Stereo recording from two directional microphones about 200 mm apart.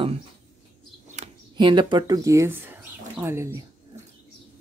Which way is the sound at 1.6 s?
25° right (ahead or behind).